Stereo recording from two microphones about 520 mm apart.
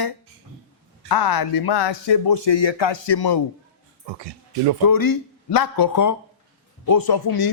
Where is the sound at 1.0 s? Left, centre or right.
Left.